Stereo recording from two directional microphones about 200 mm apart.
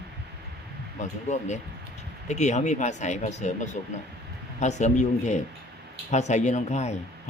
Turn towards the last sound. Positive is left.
turn(degrees=35)  # may be behind; listen again after turning